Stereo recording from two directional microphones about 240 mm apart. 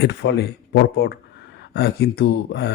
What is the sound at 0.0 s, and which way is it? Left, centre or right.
Speech, left.